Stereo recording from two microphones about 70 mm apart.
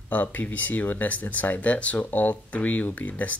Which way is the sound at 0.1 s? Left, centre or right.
Left.